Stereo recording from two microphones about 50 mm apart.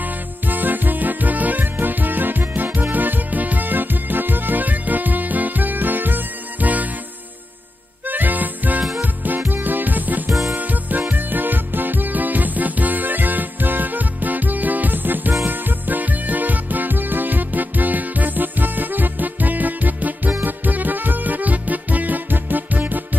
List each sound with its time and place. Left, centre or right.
0.0 s music: right
8.1 s music: right